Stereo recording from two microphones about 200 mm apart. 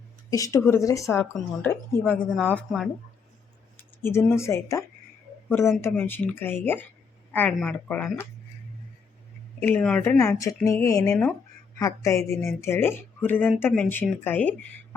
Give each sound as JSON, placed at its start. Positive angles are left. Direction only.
{"t": 0.3, "sound": "a woman's voice", "side_deg": 15}
{"t": 3.8, "sound": "a sound", "side_deg": 10}
{"t": 4.3, "sound": "a woman's voice", "side_deg": 15}
{"t": 9.6, "sound": "a woman's voice", "side_deg": 10}